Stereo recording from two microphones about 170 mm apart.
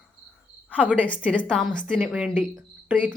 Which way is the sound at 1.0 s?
5° left (ahead or behind).